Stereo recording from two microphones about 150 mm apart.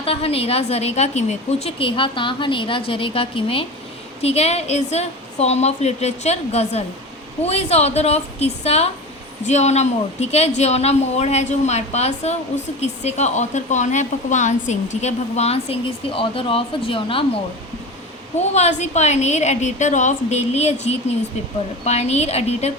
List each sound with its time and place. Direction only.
0.0 s a woman's voice: 40° left (ahead or behind)
18.5 s a woman's voice: 50° left (ahead or behind)